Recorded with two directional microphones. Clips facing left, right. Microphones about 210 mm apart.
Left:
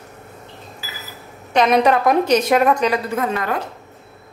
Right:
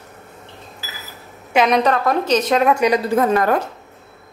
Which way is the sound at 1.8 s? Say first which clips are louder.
Left 2 dB; 10° left (ahead or behind).